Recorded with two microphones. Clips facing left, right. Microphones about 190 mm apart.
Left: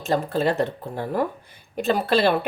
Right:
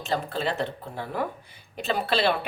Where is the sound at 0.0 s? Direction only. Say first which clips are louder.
Left 6 dB; 45° left (ahead or behind).